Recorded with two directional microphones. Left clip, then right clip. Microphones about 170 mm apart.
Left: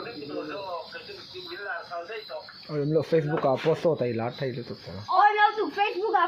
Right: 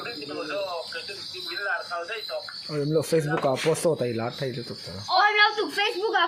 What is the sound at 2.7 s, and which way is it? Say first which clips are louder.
A woman's voice: even; 10° right (ahead or behind).